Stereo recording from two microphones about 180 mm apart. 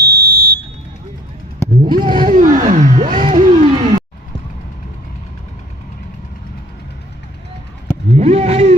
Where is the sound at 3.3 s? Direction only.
40° right (ahead or behind).